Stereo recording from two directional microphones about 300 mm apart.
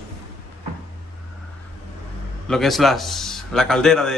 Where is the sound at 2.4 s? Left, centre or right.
Centre.